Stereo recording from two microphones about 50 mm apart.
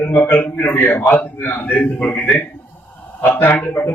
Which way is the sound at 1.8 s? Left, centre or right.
Left.